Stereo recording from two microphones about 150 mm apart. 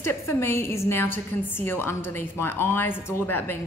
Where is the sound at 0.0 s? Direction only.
15° left (ahead or behind).